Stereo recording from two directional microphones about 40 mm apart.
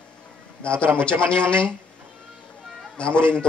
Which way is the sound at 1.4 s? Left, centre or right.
Left.